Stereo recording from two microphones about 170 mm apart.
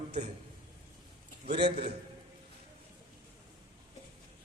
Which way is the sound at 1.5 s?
75° right (ahead or behind).